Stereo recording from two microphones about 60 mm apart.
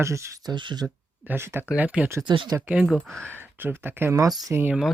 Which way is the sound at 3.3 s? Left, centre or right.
Right.